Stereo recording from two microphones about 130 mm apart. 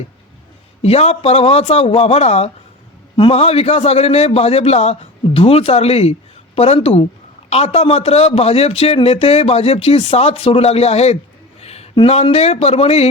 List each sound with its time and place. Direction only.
0.8 s a man's voice: 55° left (ahead or behind)
11.6 s a sound: 55° left (ahead or behind)
12.0 s a man's voice: 50° left (ahead or behind)